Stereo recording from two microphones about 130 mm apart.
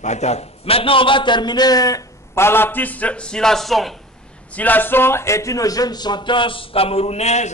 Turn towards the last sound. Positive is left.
turn(degrees=55)  # may be behind; listen again after turning